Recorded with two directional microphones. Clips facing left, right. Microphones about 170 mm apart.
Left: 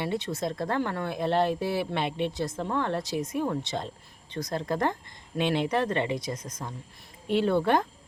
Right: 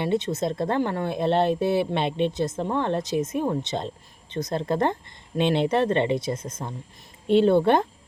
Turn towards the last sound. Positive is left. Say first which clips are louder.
# right 6 dB
turn(degrees=-25)  # may be behind; listen again after turning